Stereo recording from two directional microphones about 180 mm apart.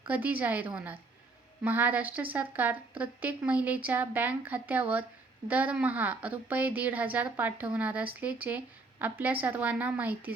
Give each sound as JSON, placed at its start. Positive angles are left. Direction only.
{"t": 0.1, "sound": "a woman's voice", "side_deg": -10}